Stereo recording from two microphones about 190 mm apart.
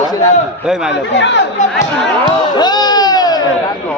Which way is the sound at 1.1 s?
70° left (ahead or behind).